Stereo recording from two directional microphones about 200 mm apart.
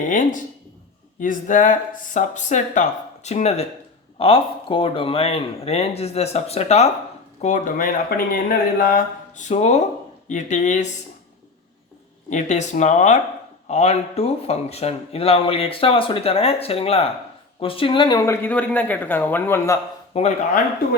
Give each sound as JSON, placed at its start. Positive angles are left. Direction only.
{"t": 0.0, "sound": "speech", "side_deg": 40}
{"t": 12.3, "sound": "speech", "side_deg": 35}
{"t": 20.1, "sound": "speech", "side_deg": 30}